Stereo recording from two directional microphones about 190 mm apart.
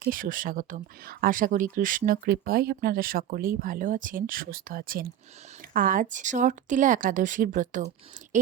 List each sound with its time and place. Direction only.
0.0 s speech: 45° right (ahead or behind)